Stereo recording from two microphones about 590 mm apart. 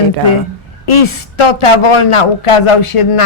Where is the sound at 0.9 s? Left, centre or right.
Left.